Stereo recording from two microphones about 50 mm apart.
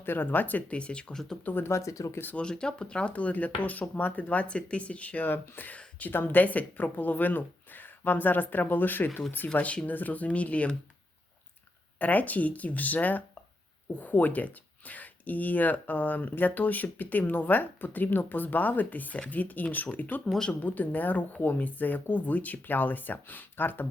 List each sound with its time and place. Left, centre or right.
0.0 s speech: left
0.8 s speech: left
1.1 s speech: centre
1.6 s speech: left
2.3 s speech: centre; by 9.0 s left
9.6 s speech: left
11.9 s speech: left